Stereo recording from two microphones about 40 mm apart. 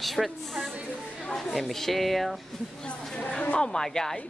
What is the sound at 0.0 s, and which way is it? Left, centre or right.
Speech, centre.